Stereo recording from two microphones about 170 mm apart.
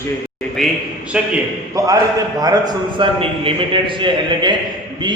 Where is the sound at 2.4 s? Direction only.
25° right (ahead or behind).